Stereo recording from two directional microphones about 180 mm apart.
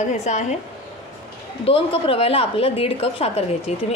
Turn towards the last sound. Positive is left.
turn(degrees=35)  # may be behind; listen again after turning